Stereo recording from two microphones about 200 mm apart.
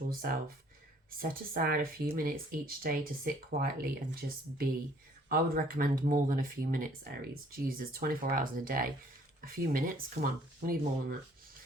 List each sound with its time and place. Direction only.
0.1 s speech: 45° right (ahead or behind)